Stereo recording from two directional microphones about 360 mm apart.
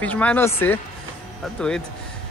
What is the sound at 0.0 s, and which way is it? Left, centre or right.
Speech, centre.